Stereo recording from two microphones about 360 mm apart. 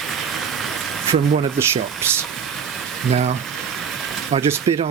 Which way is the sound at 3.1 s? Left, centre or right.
Centre.